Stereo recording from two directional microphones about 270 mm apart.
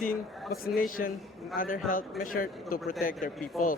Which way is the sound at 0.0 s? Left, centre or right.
Left.